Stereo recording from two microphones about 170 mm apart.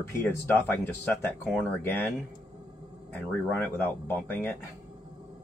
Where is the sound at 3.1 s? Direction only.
10° left (ahead or behind).